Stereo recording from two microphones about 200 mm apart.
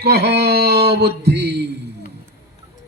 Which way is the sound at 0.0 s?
55° right (ahead or behind).